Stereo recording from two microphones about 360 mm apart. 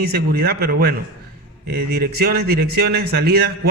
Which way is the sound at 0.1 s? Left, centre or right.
Right.